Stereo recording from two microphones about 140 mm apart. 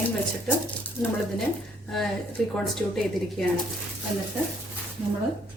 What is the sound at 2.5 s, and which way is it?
Speech, centre (ahead or behind).